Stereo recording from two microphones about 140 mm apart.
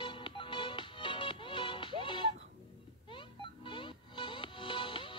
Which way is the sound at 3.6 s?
35° left (ahead or behind).